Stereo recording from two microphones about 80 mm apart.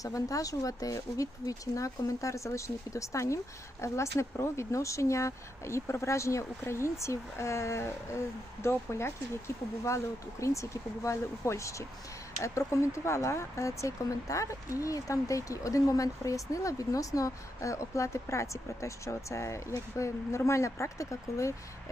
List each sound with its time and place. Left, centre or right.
0.0 s speech: left
10.4 s speech: left